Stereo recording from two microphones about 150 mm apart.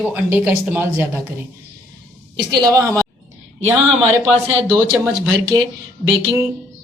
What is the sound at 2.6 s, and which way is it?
Speech, 20° right (ahead or behind).